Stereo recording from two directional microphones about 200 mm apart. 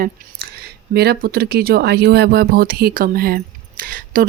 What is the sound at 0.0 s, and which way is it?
Speech, 50° right (ahead or behind).